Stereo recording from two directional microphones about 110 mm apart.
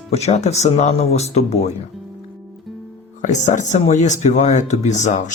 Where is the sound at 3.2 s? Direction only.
90° left.